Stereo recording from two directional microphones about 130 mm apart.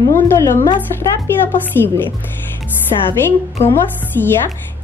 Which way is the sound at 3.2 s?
15° left (ahead or behind).